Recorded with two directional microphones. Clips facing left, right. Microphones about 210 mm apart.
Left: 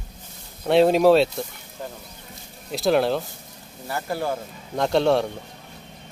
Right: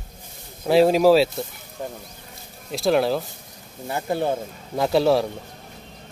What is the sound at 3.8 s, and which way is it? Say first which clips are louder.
Speech: right 3 dB; 20° right (ahead or behind).